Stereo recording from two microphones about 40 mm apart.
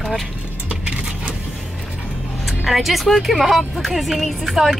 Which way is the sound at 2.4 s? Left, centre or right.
Centre.